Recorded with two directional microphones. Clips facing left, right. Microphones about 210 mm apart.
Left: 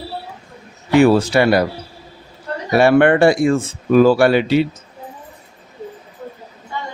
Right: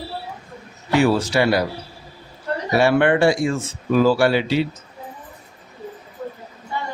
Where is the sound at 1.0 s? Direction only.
55° left (ahead or behind).